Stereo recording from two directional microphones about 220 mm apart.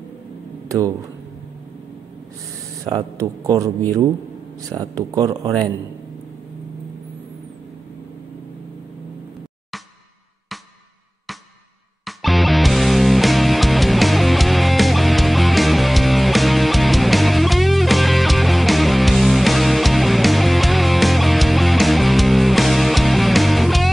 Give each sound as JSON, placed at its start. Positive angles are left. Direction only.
{"t": 0.7, "sound": "speech", "side_deg": -15}
{"t": 2.8, "sound": "a man's voice", "side_deg": -15}
{"t": 4.7, "sound": "a man's voice", "side_deg": -15}
{"t": 12.0, "sound": "music", "side_deg": 0}